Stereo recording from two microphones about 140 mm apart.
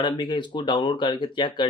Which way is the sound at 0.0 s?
35° left (ahead or behind).